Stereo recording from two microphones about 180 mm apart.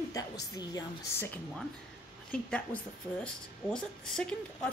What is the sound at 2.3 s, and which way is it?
Speech, 5° left (ahead or behind).